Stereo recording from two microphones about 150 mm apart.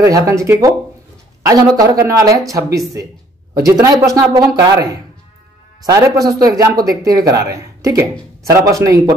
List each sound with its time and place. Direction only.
0.0 s speech: 20° right (ahead or behind)